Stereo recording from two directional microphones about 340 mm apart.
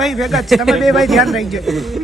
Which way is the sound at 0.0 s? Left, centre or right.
Centre.